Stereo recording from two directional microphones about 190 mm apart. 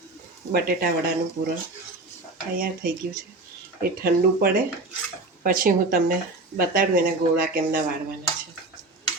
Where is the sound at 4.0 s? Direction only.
55° right (ahead or behind).